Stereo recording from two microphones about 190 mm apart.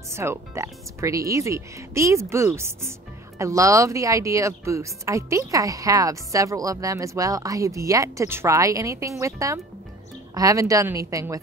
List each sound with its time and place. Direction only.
0.1 s speech: 15° right (ahead or behind)